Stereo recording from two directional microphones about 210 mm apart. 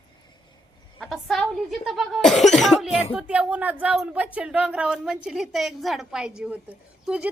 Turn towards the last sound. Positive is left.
turn(degrees=-5)  # may be behind; listen again after turning